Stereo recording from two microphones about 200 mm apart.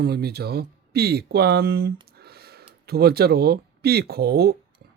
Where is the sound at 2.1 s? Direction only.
50° right (ahead or behind).